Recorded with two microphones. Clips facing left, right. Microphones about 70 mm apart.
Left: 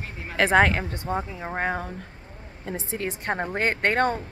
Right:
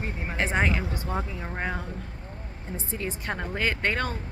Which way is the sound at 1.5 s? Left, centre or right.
Left.